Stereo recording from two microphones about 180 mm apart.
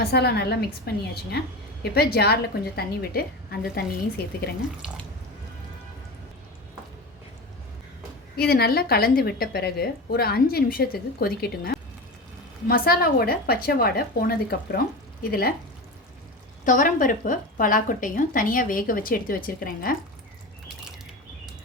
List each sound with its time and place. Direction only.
0.0 s a woman's voice: 65° left (ahead or behind)
8.4 s a woman's voice: 60° left (ahead or behind)
16.6 s a woman's voice: 45° left (ahead or behind)